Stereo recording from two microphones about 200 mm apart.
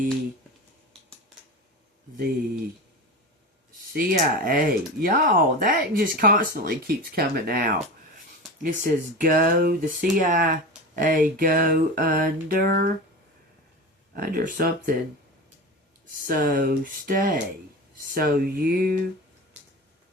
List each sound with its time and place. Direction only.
3.9 s speech: 45° right (ahead or behind)
14.1 s speech: 45° right (ahead or behind)
16.2 s speech: 45° right (ahead or behind)